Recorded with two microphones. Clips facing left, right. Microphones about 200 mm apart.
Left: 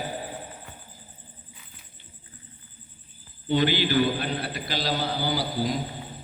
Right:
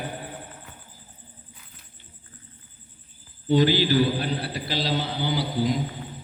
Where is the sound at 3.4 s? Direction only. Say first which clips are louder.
Right 3 dB; 40° right (ahead or behind); by 5.8 s 20° right (ahead or behind).